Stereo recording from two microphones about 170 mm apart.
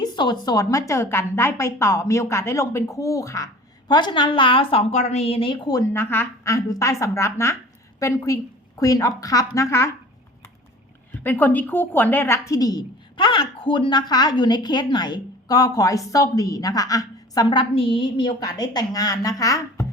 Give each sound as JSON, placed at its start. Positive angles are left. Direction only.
{"t": 0.0, "sound": "a woman's voice", "side_deg": 25}
{"t": 11.2, "sound": "a woman's voice", "side_deg": 10}